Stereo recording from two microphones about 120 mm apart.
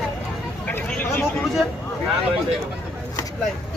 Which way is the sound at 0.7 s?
15° left (ahead or behind).